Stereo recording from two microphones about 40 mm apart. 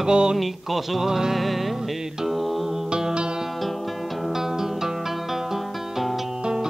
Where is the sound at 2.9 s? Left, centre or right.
Centre.